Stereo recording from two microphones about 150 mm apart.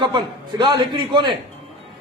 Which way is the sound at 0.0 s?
30° right (ahead or behind).